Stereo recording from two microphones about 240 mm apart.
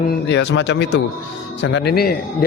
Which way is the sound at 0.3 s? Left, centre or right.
Left.